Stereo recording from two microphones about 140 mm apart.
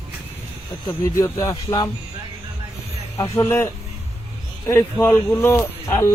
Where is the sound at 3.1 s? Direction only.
20° left (ahead or behind).